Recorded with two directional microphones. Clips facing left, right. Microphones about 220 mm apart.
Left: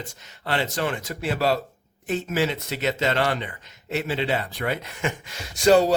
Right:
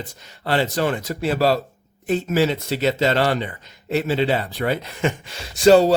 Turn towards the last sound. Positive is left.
turn(degrees=-30)  # may be behind; listen again after turning